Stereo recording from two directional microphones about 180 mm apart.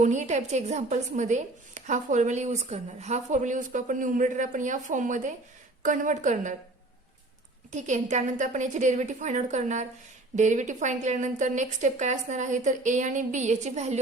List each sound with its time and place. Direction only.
0.0 s a woman's voice: 40° right (ahead or behind)
7.7 s a woman's voice: 40° right (ahead or behind)